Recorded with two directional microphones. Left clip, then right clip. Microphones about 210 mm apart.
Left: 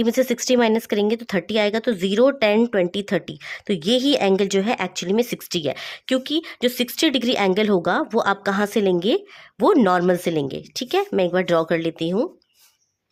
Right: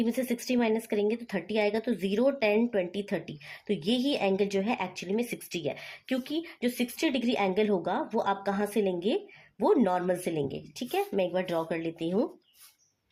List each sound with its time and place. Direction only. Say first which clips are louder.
0.0 s speech: left 11 dB; 45° left (ahead or behind)